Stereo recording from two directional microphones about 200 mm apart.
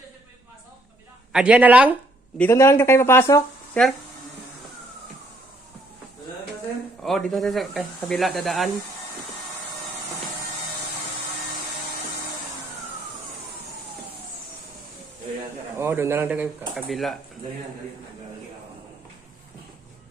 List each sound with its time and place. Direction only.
1.3 s speech: 5° right (ahead or behind)
2.4 s speech: 10° left (ahead or behind)
7.0 s speech: centre (ahead or behind)
15.8 s speech: 10° right (ahead or behind)